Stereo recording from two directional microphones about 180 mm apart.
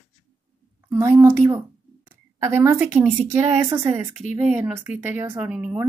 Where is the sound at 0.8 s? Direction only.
15° right (ahead or behind).